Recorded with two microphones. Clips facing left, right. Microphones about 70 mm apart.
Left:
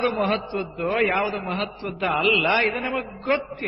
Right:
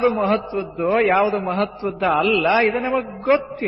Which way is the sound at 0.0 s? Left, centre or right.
Centre.